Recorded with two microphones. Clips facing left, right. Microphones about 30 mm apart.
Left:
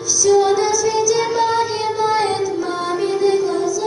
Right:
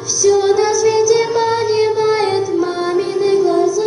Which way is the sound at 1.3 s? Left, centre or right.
Centre.